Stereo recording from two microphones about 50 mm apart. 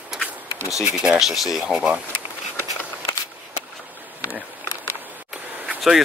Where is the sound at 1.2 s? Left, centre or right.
Centre.